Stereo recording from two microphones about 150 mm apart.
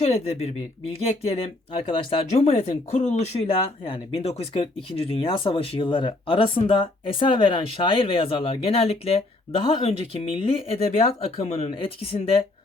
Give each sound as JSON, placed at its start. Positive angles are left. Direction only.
{"t": 0.0, "sound": "speech", "side_deg": 40}
{"t": 3.4, "sound": "speech", "side_deg": 35}